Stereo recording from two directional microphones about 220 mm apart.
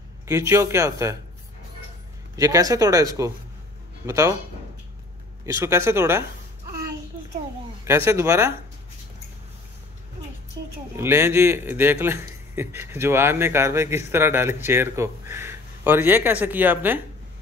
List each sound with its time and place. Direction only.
0.3 s speech: 15° right (ahead or behind)
2.3 s speech: 15° right (ahead or behind)
5.4 s speech: 15° right (ahead or behind)
7.8 s speech: 10° right (ahead or behind)
11.0 s speech: 10° right (ahead or behind)